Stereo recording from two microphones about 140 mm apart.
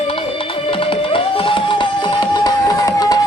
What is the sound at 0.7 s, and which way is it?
Music, 40° left (ahead or behind).